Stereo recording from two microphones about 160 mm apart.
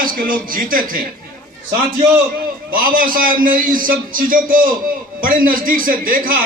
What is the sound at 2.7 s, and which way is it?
A man's voice, 60° right (ahead or behind).